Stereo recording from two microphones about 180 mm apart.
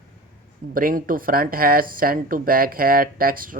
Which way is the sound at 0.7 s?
50° right (ahead or behind).